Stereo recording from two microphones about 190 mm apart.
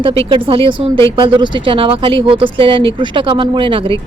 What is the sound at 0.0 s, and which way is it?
Speech, 30° right (ahead or behind).